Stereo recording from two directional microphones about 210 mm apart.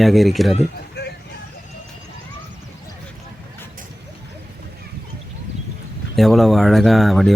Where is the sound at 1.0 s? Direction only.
50° left (ahead or behind).